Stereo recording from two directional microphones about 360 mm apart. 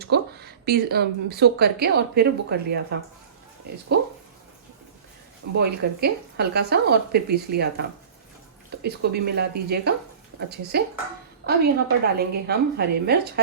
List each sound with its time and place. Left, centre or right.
0.0 s speech: right
5.5 s speech: right